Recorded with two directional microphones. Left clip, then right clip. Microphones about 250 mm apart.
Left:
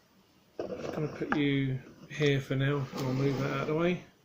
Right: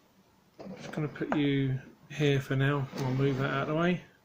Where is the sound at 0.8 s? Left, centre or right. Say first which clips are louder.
Right 3 dB; right.